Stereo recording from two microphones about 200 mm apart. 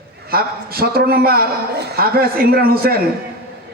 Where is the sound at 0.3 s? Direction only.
50° right (ahead or behind).